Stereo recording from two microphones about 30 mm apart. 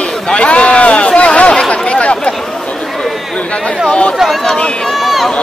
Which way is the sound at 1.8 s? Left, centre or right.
Left.